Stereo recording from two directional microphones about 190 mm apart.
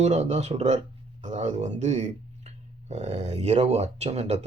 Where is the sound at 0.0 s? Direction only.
35° right (ahead or behind).